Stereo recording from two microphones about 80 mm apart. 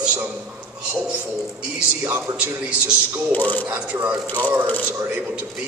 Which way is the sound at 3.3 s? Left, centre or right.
Left.